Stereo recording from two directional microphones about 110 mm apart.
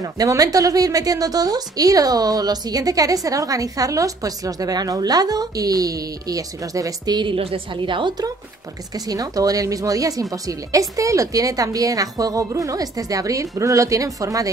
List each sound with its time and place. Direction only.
0.0 s a woman's voice: 35° right (ahead or behind)
7.3 s a woman's voice: 55° right (ahead or behind); by 14.5 s 30° right (ahead or behind)